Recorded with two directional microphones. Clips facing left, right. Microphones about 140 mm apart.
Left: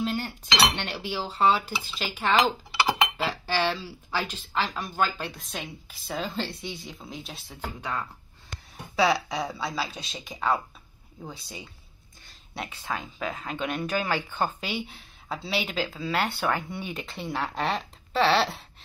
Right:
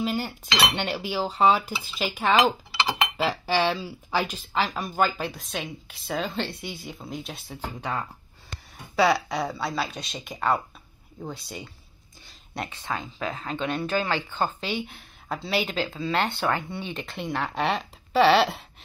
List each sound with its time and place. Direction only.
0.0 s cutlery: 10° right (ahead or behind)
1.1 s speech: 15° right (ahead or behind)
5.4 s speech: centre (ahead or behind)
7.4 s speech: 15° right (ahead or behind)
8.9 s speech: centre (ahead or behind)
14.9 s speech: centre (ahead or behind)